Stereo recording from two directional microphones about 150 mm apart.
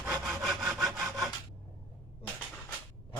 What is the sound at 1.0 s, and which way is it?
Rub, 20° right (ahead or behind).